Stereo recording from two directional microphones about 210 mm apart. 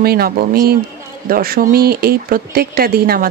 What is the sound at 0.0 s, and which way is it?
Speech, 45° right (ahead or behind).